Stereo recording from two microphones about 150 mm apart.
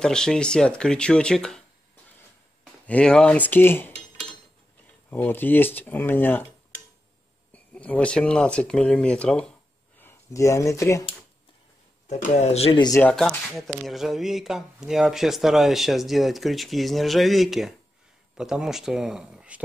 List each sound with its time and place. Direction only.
0.0 s speech: 5° left (ahead or behind)
2.6 s speech: 5° left (ahead or behind)
5.1 s speech: 10° left (ahead or behind)
7.5 s speech: 10° left (ahead or behind)
9.9 s speech: 15° left (ahead or behind)
12.4 s speech: 40° left (ahead or behind)
13.0 s speech: 5° left (ahead or behind)